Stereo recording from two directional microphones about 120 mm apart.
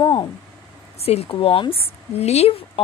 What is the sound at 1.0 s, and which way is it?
Speech, 55° left (ahead or behind).